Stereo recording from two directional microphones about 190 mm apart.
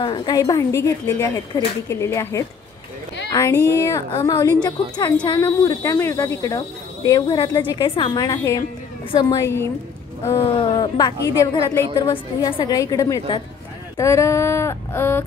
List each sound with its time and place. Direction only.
0.0 s a woman's voice: 25° left (ahead or behind)
10.5 s a woman's voice: 25° left (ahead or behind)